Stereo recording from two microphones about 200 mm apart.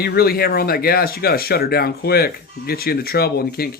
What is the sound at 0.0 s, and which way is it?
Speech, 50° left (ahead or behind).